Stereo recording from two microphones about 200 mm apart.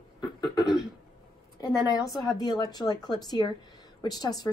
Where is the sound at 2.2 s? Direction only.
20° left (ahead or behind).